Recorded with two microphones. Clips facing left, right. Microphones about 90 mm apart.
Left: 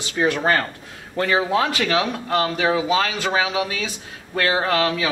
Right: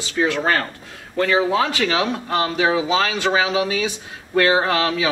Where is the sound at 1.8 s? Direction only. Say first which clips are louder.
Right 1 dB; 20° right (ahead or behind).